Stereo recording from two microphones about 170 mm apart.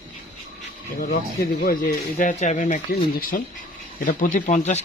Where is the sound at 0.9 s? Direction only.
55° left (ahead or behind).